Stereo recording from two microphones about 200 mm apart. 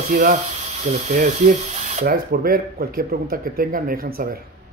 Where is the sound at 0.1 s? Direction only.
45° right (ahead or behind).